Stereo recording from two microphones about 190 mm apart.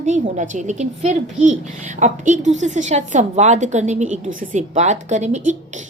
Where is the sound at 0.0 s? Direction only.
40° right (ahead or behind).